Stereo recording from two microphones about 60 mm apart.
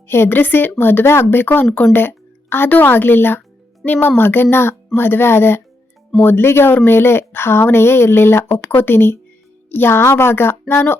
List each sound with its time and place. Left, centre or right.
0.1 s speech: left
1.7 s speech: left
2.0 s speech: left